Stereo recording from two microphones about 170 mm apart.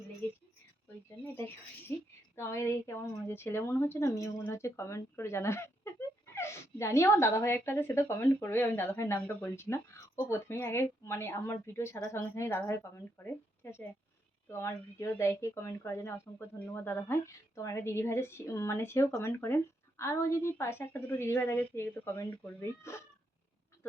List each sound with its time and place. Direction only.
2.3 s a woman's voice: 15° left (ahead or behind)